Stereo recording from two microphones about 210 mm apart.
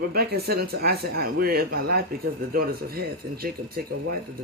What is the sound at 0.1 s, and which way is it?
Speech, 45° right (ahead or behind).